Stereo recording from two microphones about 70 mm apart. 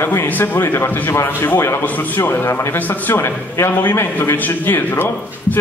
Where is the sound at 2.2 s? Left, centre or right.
Left.